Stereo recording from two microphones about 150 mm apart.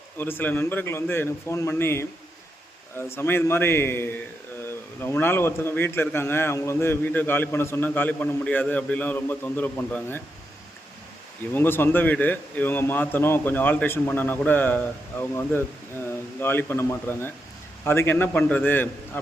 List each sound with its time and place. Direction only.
0.2 s a man's voice: 15° left (ahead or behind)
3.2 s a man's voice: 15° left (ahead or behind)
11.5 s a man's voice: 15° left (ahead or behind)